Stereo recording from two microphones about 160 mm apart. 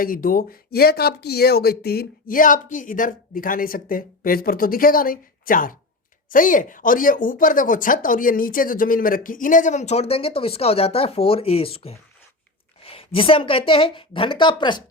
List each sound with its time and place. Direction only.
0.0 s speech: 60° left (ahead or behind); by 11.9 s 35° left (ahead or behind)
12.8 s a sound: 40° left (ahead or behind)
13.1 s speech: 35° left (ahead or behind)